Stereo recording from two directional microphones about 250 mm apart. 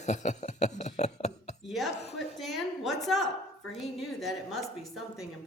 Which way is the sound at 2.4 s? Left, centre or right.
Centre.